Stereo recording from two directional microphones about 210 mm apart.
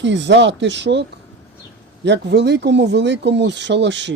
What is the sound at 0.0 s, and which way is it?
Speech, 60° right (ahead or behind).